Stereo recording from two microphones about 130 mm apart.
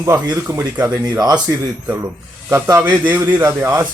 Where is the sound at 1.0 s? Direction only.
30° right (ahead or behind).